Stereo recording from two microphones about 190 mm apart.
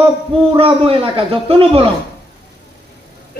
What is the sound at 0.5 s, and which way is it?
A man's voice, 30° right (ahead or behind).